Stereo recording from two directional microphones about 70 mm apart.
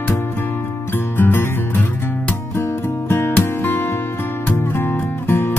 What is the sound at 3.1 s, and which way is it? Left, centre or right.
Music, left.